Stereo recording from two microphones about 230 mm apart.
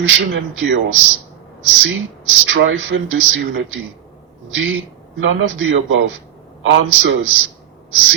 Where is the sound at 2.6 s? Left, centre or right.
Right.